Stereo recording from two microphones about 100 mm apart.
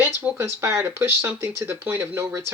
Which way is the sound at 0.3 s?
25° right (ahead or behind).